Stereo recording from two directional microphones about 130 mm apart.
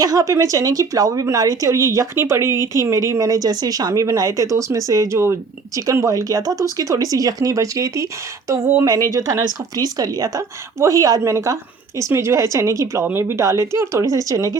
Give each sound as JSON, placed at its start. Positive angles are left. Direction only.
{"t": 0.0, "sound": "speech", "side_deg": -25}